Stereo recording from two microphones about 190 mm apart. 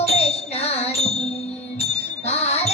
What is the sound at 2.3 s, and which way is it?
Music, 35° left (ahead or behind).